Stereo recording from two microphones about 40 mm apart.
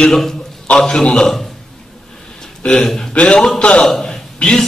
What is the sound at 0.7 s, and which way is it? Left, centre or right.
Speech, left.